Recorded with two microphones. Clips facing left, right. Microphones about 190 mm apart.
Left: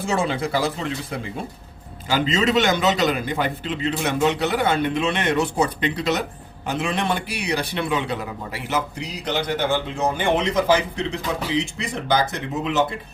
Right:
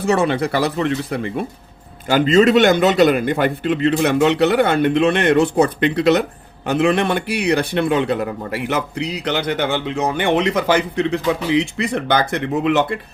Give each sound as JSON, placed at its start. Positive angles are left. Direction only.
{"t": 0.0, "sound": "speech", "side_deg": -65}